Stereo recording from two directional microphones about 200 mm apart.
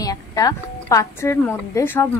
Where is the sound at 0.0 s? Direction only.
20° left (ahead or behind).